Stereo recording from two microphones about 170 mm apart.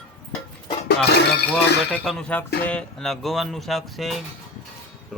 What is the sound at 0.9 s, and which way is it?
Speech, 75° left (ahead or behind).